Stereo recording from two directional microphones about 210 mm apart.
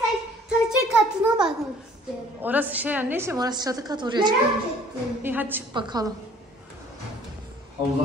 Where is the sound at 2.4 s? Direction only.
10° right (ahead or behind).